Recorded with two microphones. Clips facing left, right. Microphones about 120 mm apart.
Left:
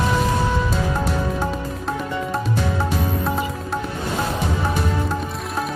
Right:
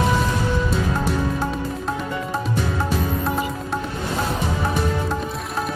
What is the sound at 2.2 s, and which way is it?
Music, centre (ahead or behind).